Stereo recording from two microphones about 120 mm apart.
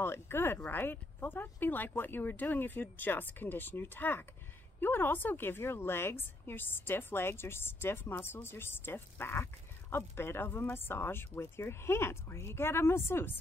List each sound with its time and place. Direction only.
0.0 s a woman's voice: 20° left (ahead or behind)